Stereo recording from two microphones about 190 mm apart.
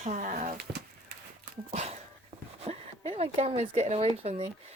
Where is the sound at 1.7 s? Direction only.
35° right (ahead or behind).